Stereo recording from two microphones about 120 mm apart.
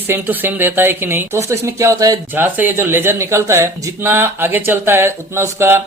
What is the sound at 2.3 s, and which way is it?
Speech, 15° right (ahead or behind).